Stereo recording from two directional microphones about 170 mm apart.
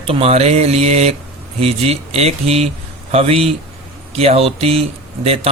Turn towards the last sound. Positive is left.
turn(degrees=-35)  # may be behind; listen again after turning